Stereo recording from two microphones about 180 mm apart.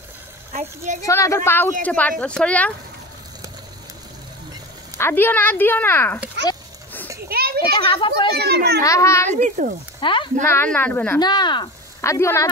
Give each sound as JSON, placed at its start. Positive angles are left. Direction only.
{"t": 0.5, "sound": "speech", "side_deg": -40}
{"t": 1.0, "sound": "speech", "side_deg": 15}
{"t": 4.9, "sound": "speech", "side_deg": 15}
{"t": 7.2, "sound": "children playing", "side_deg": -60}
{"t": 7.9, "sound": "speech", "side_deg": 30}
{"t": 8.4, "sound": "a child's voice", "side_deg": -65}
{"t": 8.8, "sound": "speech", "side_deg": 15}
{"t": 9.3, "sound": "speech", "side_deg": -45}
{"t": 9.9, "sound": "speech", "side_deg": 25}
{"t": 10.5, "sound": "speech", "side_deg": 10}
{"t": 11.1, "sound": "speech", "side_deg": 25}